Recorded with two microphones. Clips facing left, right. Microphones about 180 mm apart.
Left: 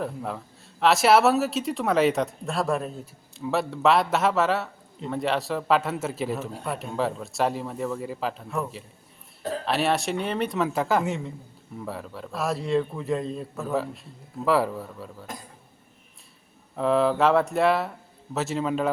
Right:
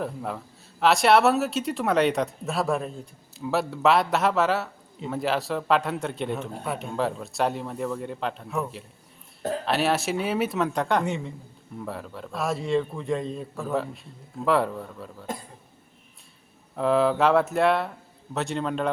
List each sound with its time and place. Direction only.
0.0 s a man's voice: centre (ahead or behind)
16.7 s a man's voice: centre (ahead or behind)